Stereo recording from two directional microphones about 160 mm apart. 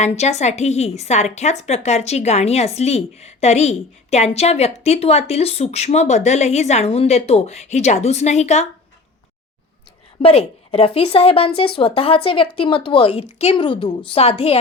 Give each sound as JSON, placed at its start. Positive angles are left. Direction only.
{"t": 0.0, "sound": "a woman's voice", "side_deg": 45}
{"t": 10.2, "sound": "a woman's voice", "side_deg": 35}